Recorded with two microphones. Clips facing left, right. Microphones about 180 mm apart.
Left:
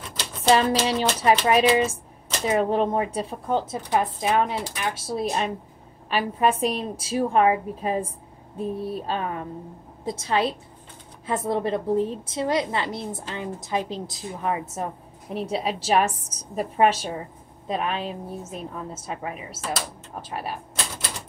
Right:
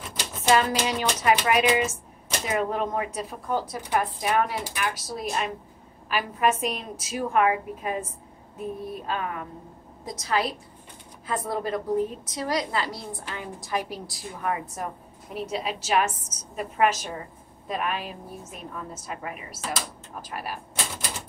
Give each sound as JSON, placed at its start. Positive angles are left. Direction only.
{"t": 0.5, "sound": "a woman's voice", "side_deg": 30}